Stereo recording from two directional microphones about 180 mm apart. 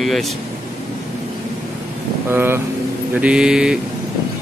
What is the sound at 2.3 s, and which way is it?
Speech, 10° right (ahead or behind).